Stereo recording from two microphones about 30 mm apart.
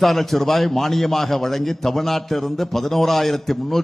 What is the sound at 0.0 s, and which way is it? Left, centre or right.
A man's voice, centre.